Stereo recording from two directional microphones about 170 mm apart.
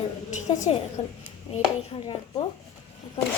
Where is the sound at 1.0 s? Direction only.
35° left (ahead or behind).